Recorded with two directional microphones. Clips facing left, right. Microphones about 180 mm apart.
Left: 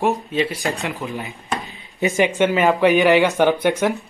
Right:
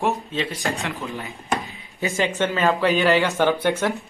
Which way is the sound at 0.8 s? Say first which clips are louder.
Left 3 dB; 20° left (ahead or behind).